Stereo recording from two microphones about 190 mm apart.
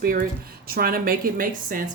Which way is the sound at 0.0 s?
50° right (ahead or behind).